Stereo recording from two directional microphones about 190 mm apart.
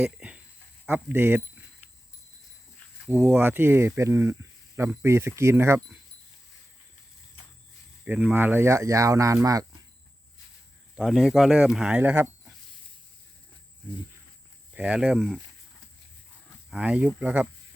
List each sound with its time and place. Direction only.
0.0 s a sound: 5° right (ahead or behind)
0.9 s speech: 10° right (ahead or behind)
3.1 s speech: 10° right (ahead or behind)
8.0 s speech: 10° right (ahead or behind)
10.9 s speech: centre (ahead or behind)
14.8 s speech: 5° right (ahead or behind)
16.6 s speech: 5° right (ahead or behind)